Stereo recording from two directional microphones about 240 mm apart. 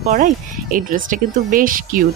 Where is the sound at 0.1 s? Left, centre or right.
Right.